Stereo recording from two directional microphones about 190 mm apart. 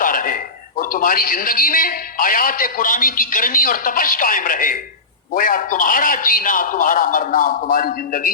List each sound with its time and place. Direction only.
0.0 s a man's voice: 45° left (ahead or behind)